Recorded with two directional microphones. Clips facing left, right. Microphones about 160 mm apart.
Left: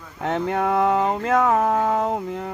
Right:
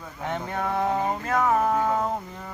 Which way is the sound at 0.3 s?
80° left.